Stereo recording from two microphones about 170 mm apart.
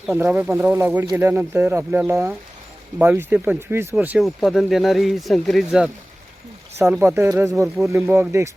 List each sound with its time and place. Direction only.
0.1 s speech: 10° right (ahead or behind)
6.7 s speech: 15° right (ahead or behind)